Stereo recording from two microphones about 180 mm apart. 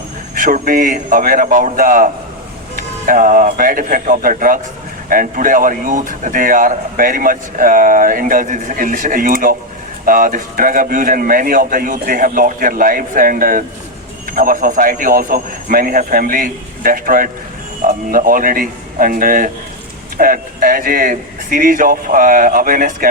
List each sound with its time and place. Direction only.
0.3 s speech: 50° right (ahead or behind)
3.1 s speech: 50° right (ahead or behind)